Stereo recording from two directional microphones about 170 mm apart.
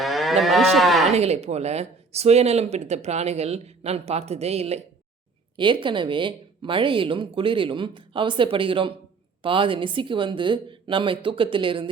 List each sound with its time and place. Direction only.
0.0 s moo: centre (ahead or behind)
1.1 s speech: 40° right (ahead or behind)